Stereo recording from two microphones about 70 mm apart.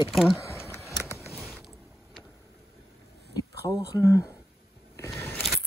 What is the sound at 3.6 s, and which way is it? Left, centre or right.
Speech, left.